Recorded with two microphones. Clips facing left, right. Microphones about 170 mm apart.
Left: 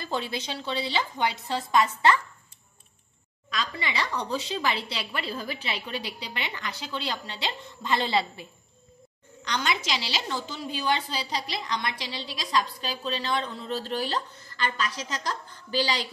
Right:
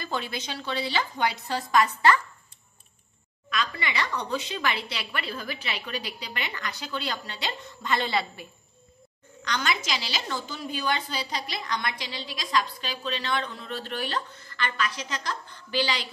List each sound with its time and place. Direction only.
0.0 s a woman's voice: 30° left (ahead or behind)
3.4 s a woman's voice: 30° left (ahead or behind)
9.5 s a woman's voice: 25° left (ahead or behind)